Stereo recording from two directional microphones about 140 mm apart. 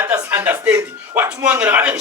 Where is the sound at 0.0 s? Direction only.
15° right (ahead or behind).